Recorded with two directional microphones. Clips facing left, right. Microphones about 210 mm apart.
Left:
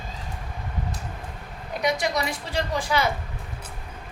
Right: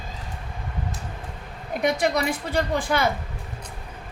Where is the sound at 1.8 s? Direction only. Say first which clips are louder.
Right 3 dB; 55° right (ahead or behind).